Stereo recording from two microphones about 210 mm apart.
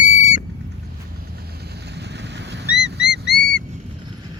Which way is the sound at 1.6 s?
50° right (ahead or behind).